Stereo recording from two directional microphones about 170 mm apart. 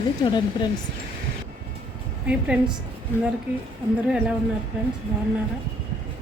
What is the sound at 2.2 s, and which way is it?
Speech, 5° right (ahead or behind).